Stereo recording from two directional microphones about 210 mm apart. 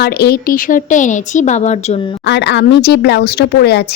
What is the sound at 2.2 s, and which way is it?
A woman's voice, 55° left (ahead or behind).